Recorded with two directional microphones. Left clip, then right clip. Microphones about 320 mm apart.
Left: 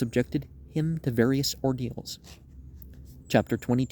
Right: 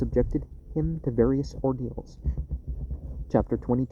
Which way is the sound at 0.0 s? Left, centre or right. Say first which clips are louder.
Right 2 dB; left.